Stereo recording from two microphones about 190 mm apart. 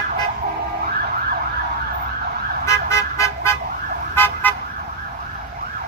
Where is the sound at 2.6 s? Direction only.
15° left (ahead or behind).